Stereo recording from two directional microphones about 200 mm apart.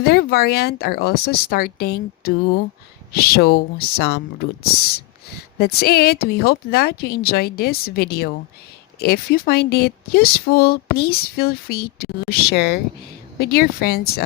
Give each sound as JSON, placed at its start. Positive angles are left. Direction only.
{"t": 0.0, "sound": "speech", "side_deg": 50}